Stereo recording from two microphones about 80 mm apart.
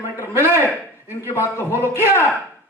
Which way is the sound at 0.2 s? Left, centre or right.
Left.